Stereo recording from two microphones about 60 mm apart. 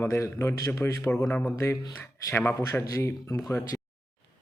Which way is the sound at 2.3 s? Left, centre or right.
Left.